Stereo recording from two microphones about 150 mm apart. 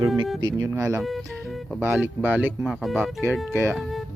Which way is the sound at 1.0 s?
Centre (ahead or behind).